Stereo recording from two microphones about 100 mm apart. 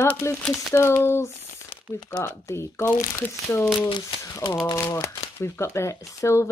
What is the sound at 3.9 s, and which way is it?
Speech, 55° left (ahead or behind).